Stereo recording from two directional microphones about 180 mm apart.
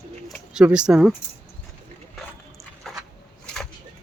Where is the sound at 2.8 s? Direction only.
Centre (ahead or behind).